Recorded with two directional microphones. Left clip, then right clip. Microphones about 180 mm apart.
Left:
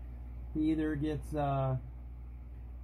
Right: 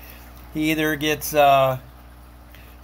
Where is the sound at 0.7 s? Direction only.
60° right (ahead or behind).